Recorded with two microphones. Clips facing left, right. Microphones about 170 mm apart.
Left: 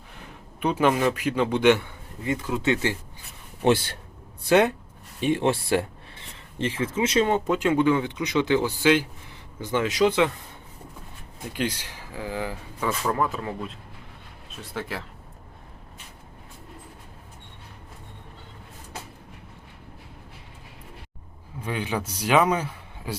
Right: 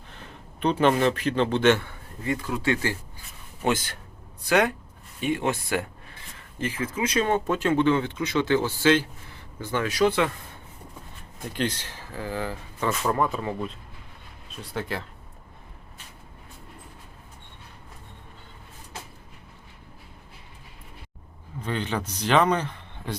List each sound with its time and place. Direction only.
0.6 s speech: 10° left (ahead or behind)
11.5 s speech: 10° left (ahead or behind)
13.1 s speech: centre (ahead or behind)
21.6 s a man's voice: 10° left (ahead or behind)